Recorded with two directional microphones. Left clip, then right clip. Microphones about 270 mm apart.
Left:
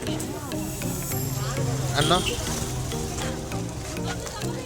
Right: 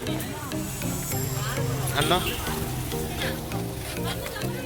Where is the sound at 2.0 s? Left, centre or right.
Left.